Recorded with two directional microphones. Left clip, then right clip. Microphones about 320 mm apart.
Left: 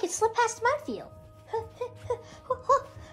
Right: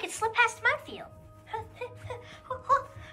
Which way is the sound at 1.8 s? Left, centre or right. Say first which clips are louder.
Left 6 dB; centre.